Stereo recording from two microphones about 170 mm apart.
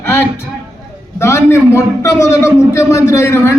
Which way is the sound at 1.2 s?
15° left (ahead or behind).